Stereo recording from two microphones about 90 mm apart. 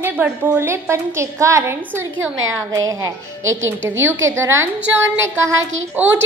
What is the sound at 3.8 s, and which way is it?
A woman's voice, 25° right (ahead or behind).